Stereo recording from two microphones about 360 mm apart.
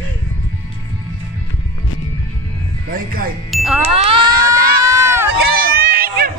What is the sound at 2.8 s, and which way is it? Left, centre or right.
Speech, right.